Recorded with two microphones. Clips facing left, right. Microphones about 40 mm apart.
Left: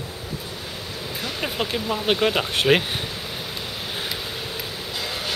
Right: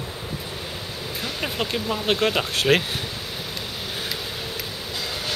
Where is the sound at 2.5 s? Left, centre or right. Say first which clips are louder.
Left 2 dB; centre.